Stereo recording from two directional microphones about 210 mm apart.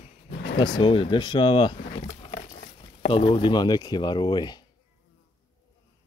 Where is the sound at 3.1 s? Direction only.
25° left (ahead or behind).